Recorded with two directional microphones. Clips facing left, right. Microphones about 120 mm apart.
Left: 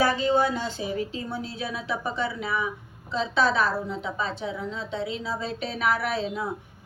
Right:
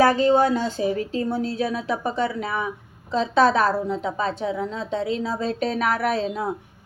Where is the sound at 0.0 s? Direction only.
45° right (ahead or behind).